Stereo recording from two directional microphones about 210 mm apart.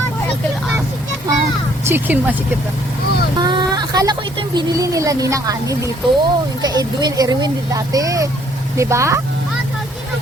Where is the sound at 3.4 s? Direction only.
20° right (ahead or behind).